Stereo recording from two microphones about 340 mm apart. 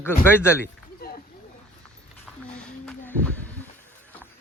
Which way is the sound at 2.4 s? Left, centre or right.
Centre.